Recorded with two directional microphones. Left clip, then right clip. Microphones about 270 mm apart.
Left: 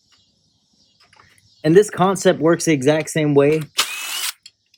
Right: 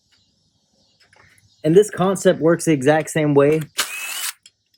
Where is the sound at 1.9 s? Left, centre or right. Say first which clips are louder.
Left 2 dB; left.